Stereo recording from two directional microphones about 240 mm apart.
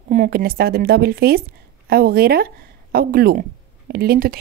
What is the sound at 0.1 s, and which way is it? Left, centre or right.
A woman's voice, right.